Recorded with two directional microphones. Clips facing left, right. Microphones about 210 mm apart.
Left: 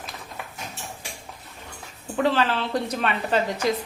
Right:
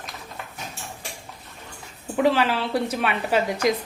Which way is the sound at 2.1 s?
10° right (ahead or behind).